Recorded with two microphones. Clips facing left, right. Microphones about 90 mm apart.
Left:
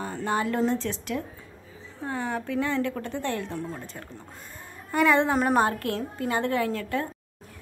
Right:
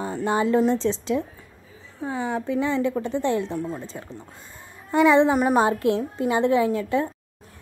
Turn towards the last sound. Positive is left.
turn(degrees=-20)  # may be behind; listen again after turning